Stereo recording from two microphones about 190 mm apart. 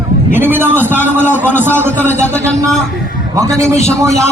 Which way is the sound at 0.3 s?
10° right (ahead or behind).